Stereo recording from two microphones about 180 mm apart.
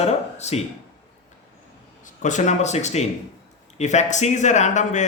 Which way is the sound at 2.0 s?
45° left (ahead or behind).